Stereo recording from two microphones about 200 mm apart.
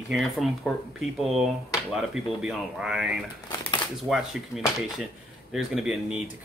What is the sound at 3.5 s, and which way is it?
Shuffling cards, 20° left (ahead or behind).